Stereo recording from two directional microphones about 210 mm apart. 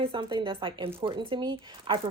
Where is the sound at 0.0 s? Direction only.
25° right (ahead or behind).